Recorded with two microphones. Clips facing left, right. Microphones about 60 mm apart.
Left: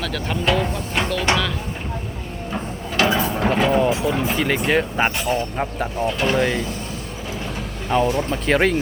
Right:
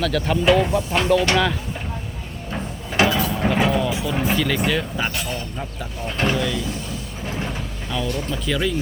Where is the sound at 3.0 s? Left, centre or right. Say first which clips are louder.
Even; left.